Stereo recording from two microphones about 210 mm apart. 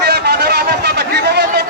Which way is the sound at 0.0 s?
50° right (ahead or behind).